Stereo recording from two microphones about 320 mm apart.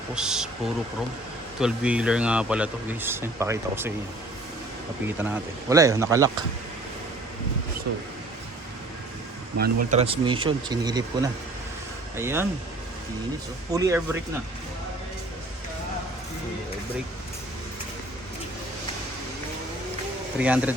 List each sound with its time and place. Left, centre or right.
0.1 s speech: centre
5.0 s speech: centre
9.6 s speech: centre
13.7 s speech: centre
20.4 s speech: centre